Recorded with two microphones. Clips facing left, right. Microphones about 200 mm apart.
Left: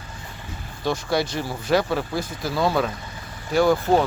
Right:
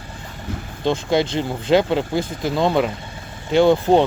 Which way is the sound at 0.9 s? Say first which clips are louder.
Right 4 dB; 25° right (ahead or behind).